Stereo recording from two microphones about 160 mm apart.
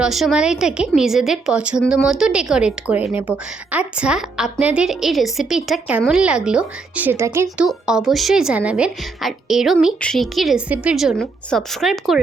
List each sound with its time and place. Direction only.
0.0 s a woman's voice: centre (ahead or behind); by 7.5 s 15° right (ahead or behind)
7.6 s a woman's voice: 5° right (ahead or behind)